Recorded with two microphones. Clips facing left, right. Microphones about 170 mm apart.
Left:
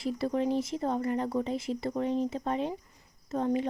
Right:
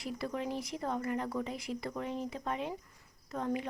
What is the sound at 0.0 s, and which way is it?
Speech, 30° left (ahead or behind).